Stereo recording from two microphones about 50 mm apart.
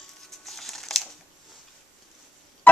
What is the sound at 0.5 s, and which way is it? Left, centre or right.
Crumpling, centre.